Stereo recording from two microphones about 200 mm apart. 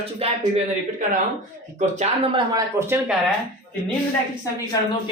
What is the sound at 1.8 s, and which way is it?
Speech, 35° right (ahead or behind).